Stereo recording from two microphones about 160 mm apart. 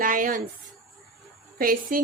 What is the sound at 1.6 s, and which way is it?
Speech, 60° right (ahead or behind).